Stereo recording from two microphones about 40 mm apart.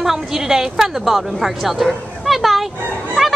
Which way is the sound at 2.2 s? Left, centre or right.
Centre.